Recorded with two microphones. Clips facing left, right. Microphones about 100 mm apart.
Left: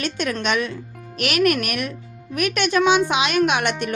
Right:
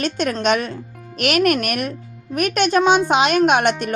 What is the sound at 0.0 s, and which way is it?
A woman's voice, 40° right (ahead or behind).